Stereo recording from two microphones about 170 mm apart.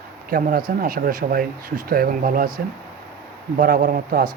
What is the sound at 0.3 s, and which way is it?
Speech, 55° right (ahead or behind).